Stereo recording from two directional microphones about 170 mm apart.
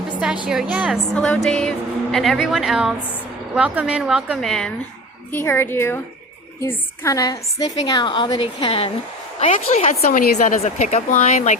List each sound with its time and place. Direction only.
0.4 s a woman's voice: 5° right (ahead or behind)
1.1 s a woman's voice: 5° left (ahead or behind)
5.3 s a woman's voice: 15° left (ahead or behind); by 11.5 s 45° left (ahead or behind)